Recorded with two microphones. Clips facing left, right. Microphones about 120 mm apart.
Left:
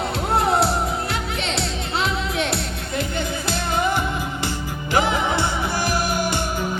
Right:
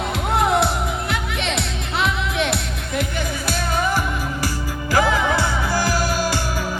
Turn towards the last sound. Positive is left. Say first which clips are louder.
# even
turn(degrees=25)  # may be behind; listen again after turning